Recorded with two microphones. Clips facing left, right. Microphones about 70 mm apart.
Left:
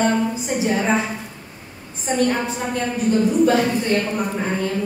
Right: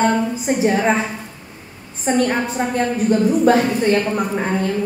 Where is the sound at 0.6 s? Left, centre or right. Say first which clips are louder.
Right 3 dB; right.